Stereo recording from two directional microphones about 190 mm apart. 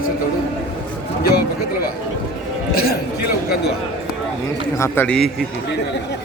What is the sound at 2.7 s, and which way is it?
Speech, 55° left (ahead or behind).